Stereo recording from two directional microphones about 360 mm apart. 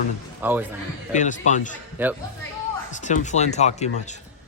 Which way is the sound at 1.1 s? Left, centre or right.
Centre.